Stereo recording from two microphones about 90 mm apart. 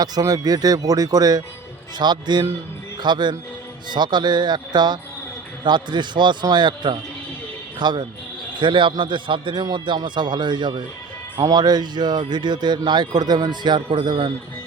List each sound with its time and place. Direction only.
0.0 s a man's voice: 45° right (ahead or behind)
11.3 s speech: 45° right (ahead or behind)